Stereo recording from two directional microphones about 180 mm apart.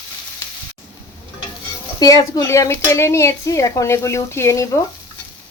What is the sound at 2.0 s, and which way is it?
Speech, 20° left (ahead or behind).